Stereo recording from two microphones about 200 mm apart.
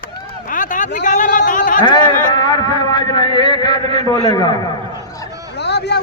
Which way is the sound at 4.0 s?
20° left (ahead or behind).